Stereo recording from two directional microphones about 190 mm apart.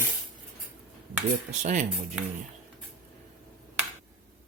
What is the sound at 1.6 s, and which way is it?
Speech, 40° right (ahead or behind).